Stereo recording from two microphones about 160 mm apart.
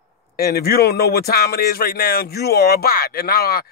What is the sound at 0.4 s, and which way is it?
Speech, 75° left (ahead or behind).